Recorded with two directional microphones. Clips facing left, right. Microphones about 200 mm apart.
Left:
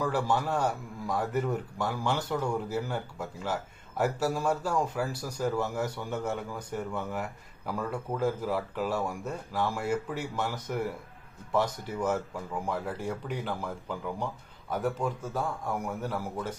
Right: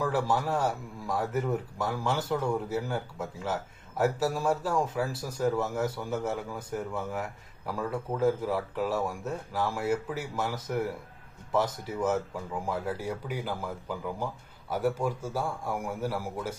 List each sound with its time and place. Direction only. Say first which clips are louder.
0.0 s a man's voice: even; 5° right (ahead or behind)